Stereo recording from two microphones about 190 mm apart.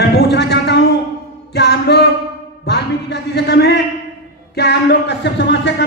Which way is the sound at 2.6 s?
60° left (ahead or behind).